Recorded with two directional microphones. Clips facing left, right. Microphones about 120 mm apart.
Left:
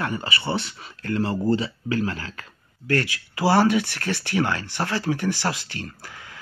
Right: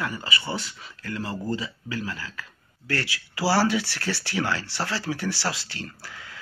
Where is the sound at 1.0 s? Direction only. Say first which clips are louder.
Left 8 dB; 45° left (ahead or behind).